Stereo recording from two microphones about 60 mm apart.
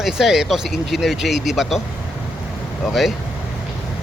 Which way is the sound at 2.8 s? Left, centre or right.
Centre.